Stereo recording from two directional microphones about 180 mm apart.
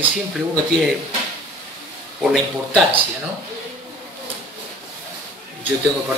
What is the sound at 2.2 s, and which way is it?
Speech, centre (ahead or behind).